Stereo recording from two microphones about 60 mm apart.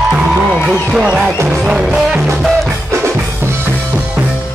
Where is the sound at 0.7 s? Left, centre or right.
Centre.